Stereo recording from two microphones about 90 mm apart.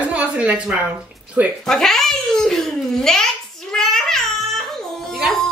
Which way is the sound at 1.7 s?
5° left (ahead or behind).